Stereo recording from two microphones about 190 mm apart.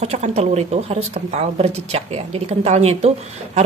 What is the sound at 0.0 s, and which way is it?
Speech, 35° right (ahead or behind).